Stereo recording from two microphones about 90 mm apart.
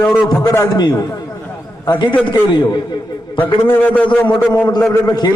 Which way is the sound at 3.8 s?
15° left (ahead or behind).